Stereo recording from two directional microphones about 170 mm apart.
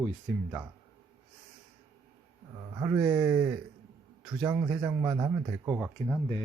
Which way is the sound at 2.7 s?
15° right (ahead or behind).